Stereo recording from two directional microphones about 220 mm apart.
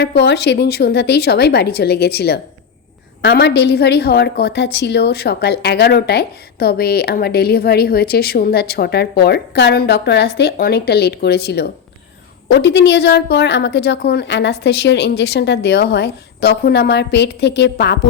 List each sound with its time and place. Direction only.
0.0 s a woman's voice: 50° left (ahead or behind)